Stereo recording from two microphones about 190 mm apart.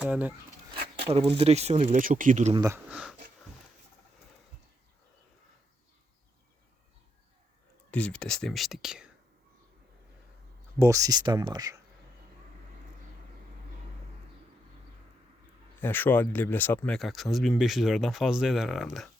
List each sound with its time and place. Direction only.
0.0 s speech: 10° right (ahead or behind)
1.3 s speech: 35° right (ahead or behind)
2.5 s speech: 15° right (ahead or behind)
2.9 s speech: 5° right (ahead or behind)
7.9 s speech: 5° left (ahead or behind)
10.8 s speech: 15° right (ahead or behind)
15.8 s speech: 10° left (ahead or behind)